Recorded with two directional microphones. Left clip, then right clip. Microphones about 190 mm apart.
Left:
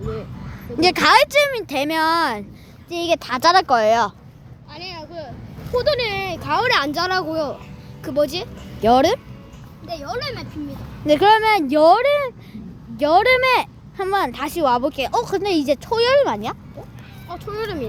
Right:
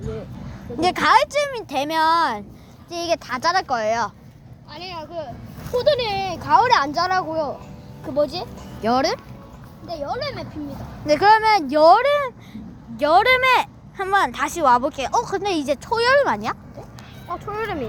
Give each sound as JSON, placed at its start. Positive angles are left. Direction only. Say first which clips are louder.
{"t": 0.8, "sound": "speech", "louder": "left 2 dB", "side_deg": 20}
{"t": 4.7, "sound": "a sound", "louder": "right 1 dB", "side_deg": -25}
{"t": 5.7, "sound": "speech", "louder": "even", "side_deg": -10}
{"t": 6.7, "sound": "speech", "louder": "right 1 dB", "side_deg": 25}
{"t": 7.3, "sound": "speech", "louder": "left 1 dB", "side_deg": 45}
{"t": 11.0, "sound": "speech", "louder": "left 1 dB", "side_deg": 20}
{"t": 17.4, "sound": "speech", "louder": "left 1 dB", "side_deg": 30}